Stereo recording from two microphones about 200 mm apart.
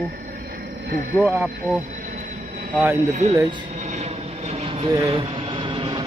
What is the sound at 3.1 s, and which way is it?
Speech, 35° right (ahead or behind).